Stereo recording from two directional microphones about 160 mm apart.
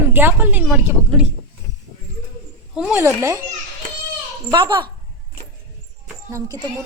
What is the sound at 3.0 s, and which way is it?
Speech, 15° right (ahead or behind).